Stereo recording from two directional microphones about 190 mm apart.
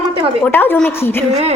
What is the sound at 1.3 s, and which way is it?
Music, 35° right (ahead or behind).